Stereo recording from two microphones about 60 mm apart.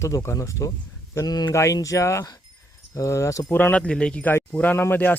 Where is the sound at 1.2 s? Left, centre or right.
Left.